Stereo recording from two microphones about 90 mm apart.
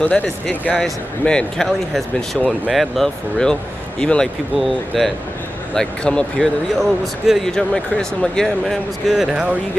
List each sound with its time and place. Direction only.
0.0 s speech: 15° left (ahead or behind); by 9.3 s centre (ahead or behind)
9.3 s speech: 15° right (ahead or behind)